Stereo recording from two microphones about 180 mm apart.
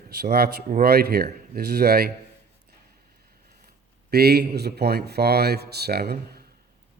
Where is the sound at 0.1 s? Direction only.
60° right (ahead or behind).